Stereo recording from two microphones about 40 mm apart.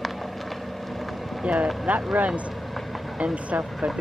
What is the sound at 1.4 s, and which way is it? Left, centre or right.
Speech, right.